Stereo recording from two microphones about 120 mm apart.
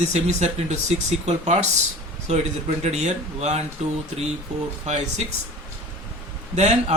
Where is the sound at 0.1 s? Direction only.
70° right (ahead or behind).